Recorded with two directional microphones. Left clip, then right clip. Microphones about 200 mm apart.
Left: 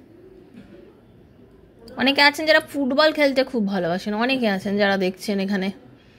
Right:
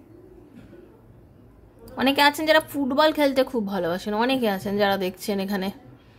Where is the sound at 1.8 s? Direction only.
5° right (ahead or behind).